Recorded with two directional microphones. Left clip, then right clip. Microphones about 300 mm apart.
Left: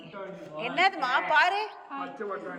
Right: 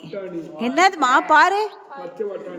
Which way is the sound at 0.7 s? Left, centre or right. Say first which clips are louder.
Right 9 dB; right.